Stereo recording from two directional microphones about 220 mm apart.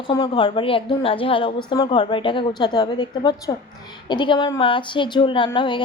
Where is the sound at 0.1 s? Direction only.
20° left (ahead or behind).